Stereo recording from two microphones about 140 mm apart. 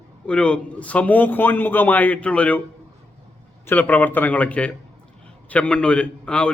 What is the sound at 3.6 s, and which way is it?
A man's voice, 10° left (ahead or behind).